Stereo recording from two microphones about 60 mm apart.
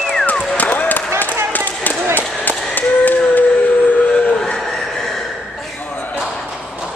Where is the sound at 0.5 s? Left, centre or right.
Left.